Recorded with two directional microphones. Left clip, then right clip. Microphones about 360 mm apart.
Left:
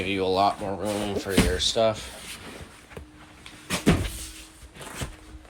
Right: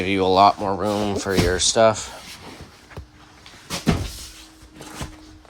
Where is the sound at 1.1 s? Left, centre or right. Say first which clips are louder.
Right 4 dB; centre.